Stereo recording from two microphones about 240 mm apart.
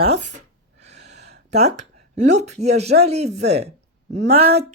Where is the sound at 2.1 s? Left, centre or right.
Right.